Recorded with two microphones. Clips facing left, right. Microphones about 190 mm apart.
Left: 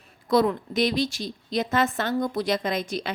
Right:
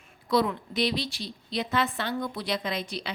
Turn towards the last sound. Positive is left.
turn(degrees=45)  # may be behind; listen again after turning